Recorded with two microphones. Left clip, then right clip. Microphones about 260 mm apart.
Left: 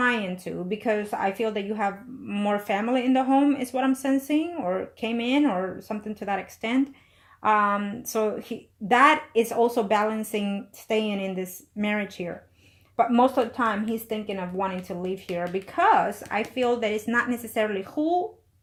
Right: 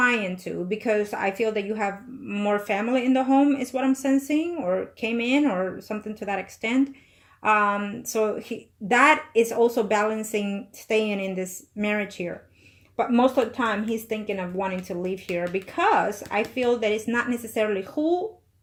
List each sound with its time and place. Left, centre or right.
0.4 s a woman's voice: left